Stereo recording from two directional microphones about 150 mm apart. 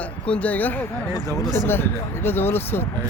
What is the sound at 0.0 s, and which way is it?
Speech, 10° left (ahead or behind).